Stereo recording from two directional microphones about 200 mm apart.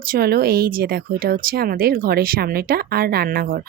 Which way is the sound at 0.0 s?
45° right (ahead or behind).